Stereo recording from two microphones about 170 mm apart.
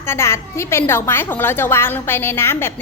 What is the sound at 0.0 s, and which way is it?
A woman's voice, 15° left (ahead or behind).